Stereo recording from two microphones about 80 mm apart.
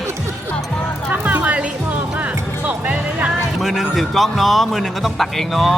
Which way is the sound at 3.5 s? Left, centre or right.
Centre.